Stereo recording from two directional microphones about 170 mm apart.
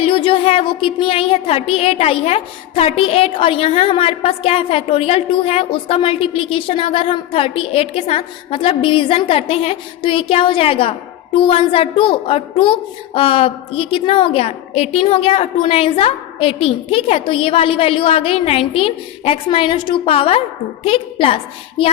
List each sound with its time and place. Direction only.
0.0 s speech: 30° left (ahead or behind)